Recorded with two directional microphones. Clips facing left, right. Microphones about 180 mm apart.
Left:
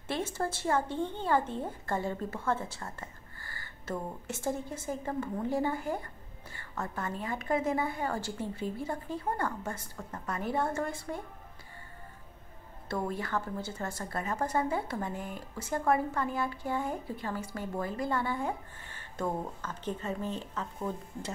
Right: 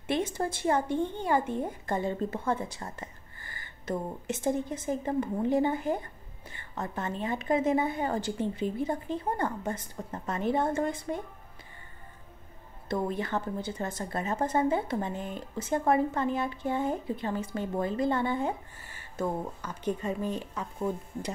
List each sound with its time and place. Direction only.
0.1 s a woman's voice: 15° right (ahead or behind)
12.8 s a woman's voice: 20° right (ahead or behind)
18.8 s a woman's voice: 10° right (ahead or behind)